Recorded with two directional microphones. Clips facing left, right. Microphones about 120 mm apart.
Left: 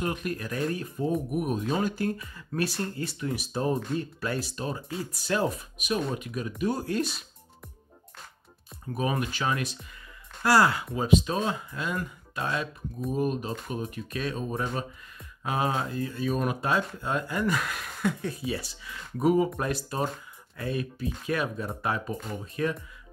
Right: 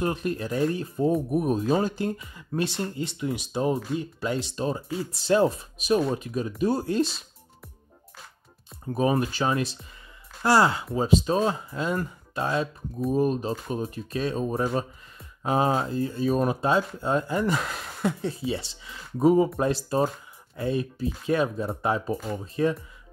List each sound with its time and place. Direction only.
0.0 s speech: 30° right (ahead or behind)
8.8 s speech: 30° right (ahead or behind)